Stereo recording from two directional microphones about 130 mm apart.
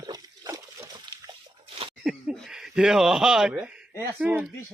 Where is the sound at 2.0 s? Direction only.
5° right (ahead or behind).